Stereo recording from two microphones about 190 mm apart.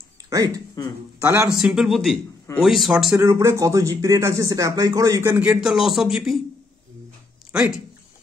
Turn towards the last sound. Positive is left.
turn(degrees=-5)  # may be behind; listen again after turning